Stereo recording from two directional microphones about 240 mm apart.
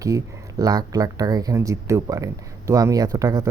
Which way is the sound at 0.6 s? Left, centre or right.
Centre.